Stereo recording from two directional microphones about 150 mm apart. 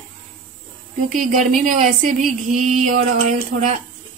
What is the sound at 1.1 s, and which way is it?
Speech, 65° right (ahead or behind).